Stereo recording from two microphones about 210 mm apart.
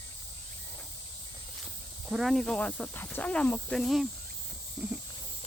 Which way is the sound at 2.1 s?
Centre (ahead or behind).